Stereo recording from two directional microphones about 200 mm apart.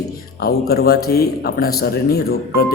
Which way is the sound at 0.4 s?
50° left (ahead or behind).